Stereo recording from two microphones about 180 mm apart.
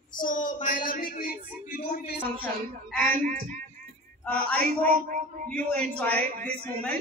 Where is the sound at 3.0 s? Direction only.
50° right (ahead or behind).